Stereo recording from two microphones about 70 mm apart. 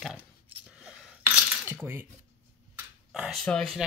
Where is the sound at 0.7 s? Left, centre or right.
Centre.